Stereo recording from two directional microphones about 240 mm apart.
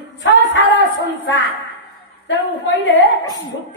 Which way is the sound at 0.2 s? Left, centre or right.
Left.